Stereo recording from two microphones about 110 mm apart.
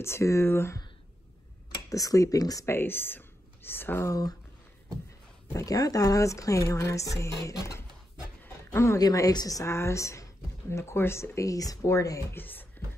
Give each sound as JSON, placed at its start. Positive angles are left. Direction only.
{"t": 0.0, "sound": "speech", "side_deg": 25}
{"t": 1.9, "sound": "speech", "side_deg": 30}
{"t": 2.7, "sound": "speech", "side_deg": 20}
{"t": 5.5, "sound": "speech", "side_deg": 30}
{"t": 8.5, "sound": "a sound", "side_deg": 25}
{"t": 9.0, "sound": "speech", "side_deg": 35}